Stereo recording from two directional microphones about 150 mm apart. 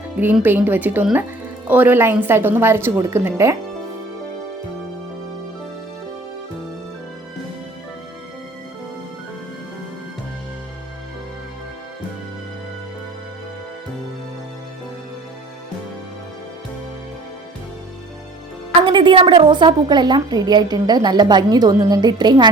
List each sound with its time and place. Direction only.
0.4 s a woman's voice: 15° right (ahead or behind)
18.9 s a woman's voice: 35° right (ahead or behind)